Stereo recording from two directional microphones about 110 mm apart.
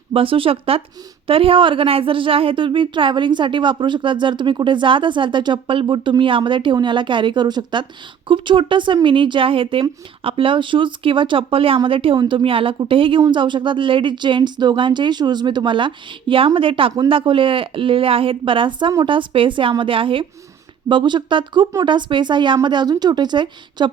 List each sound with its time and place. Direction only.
0.1 s a woman's voice: 55° right (ahead or behind)